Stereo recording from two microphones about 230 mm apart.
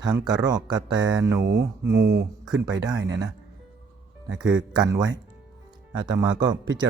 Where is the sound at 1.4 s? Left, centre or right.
Right.